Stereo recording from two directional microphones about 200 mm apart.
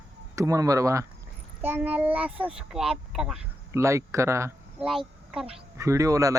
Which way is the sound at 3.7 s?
15° right (ahead or behind).